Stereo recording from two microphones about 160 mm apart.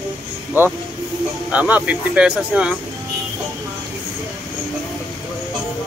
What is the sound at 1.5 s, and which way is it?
A man's voice, 10° right (ahead or behind).